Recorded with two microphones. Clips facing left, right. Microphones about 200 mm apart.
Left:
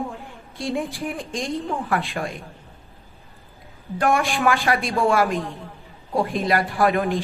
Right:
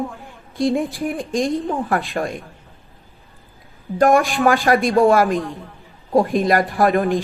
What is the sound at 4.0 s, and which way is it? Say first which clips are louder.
A man's voice: right 6 dB; 40° right (ahead or behind).